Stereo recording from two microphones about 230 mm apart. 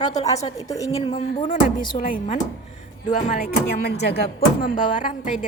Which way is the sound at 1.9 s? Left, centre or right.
Left.